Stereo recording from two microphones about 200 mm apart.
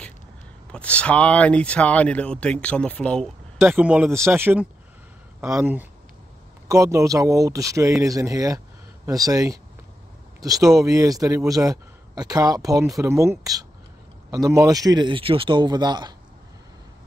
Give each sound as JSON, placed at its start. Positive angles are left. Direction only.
{"t": 0.7, "sound": "speech", "side_deg": 5}
{"t": 3.6, "sound": "a man's voice", "side_deg": -10}